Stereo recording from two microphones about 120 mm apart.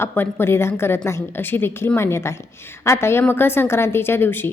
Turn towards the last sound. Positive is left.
turn(degrees=20)  # may be behind; listen again after turning